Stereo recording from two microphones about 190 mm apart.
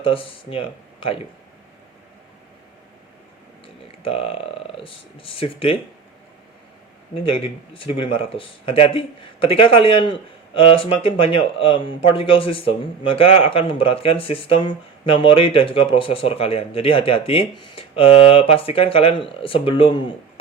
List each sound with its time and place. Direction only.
0.0 s speech: 30° left (ahead or behind)
4.0 s speech: 30° left (ahead or behind)
7.3 s speech: 30° left (ahead or behind)